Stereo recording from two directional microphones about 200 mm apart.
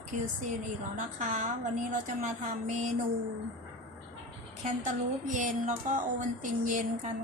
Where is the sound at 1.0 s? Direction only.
40° right (ahead or behind).